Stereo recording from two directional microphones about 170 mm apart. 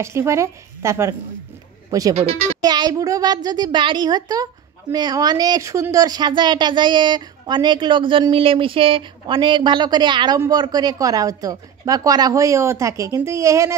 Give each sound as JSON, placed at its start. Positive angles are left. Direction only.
{"t": 0.0, "sound": "a woman's voice", "side_deg": -15}